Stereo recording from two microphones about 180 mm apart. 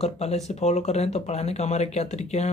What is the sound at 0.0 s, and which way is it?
Speech, 35° left (ahead or behind).